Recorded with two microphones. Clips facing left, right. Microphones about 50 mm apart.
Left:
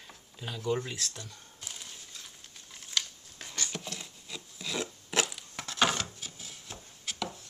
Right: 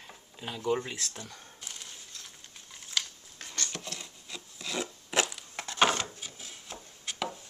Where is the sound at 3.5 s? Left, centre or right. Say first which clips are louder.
Even; centre.